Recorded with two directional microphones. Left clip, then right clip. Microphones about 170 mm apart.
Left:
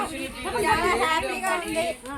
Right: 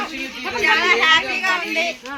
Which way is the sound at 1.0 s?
20° left (ahead or behind).